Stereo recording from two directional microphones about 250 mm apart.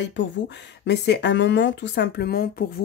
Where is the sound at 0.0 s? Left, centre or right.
Left.